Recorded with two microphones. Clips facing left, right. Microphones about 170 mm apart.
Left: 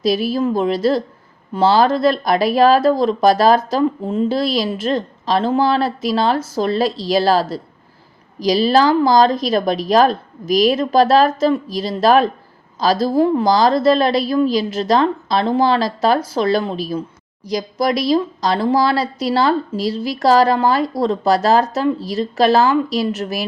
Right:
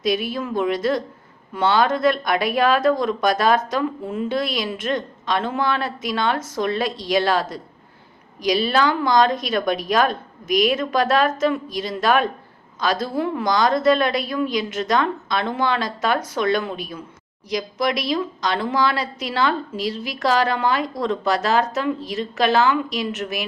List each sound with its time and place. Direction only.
0.0 s speech: 35° left (ahead or behind)